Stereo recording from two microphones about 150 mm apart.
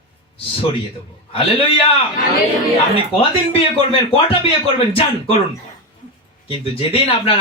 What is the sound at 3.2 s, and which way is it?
Speech, 35° left (ahead or behind).